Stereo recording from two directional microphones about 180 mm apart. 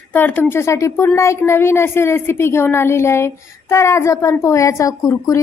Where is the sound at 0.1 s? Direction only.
10° left (ahead or behind).